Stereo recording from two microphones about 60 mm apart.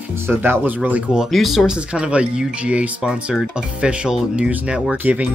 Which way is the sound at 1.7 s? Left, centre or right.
Centre.